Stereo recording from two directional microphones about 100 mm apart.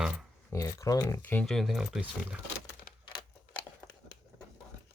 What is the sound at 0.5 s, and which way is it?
Speech, 30° left (ahead or behind).